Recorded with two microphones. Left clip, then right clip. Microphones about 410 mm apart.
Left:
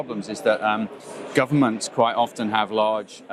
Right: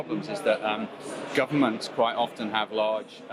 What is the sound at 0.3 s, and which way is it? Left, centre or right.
Speech, left.